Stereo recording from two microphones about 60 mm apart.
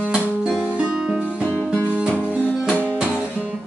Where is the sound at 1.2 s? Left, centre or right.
Left.